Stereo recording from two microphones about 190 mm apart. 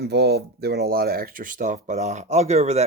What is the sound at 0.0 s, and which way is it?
Speech, 60° right (ahead or behind).